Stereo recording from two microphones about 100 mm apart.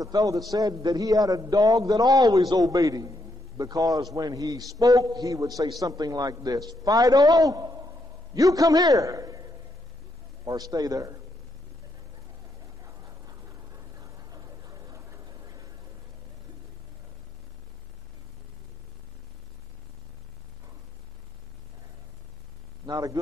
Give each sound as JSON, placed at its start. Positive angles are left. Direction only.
{"t": 0.0, "sound": "a man's voice", "side_deg": -35}
{"t": 12.8, "sound": "vehicle", "side_deg": -35}
{"t": 22.8, "sound": "a man's voice", "side_deg": -40}